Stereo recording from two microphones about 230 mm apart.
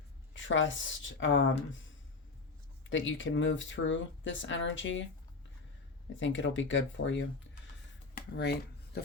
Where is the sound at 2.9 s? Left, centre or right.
Left.